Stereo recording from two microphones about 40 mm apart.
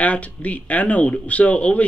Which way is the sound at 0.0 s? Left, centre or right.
Left.